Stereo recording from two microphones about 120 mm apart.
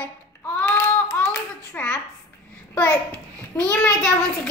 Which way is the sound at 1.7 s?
15° left (ahead or behind).